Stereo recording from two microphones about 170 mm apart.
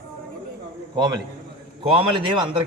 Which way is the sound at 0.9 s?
25° right (ahead or behind).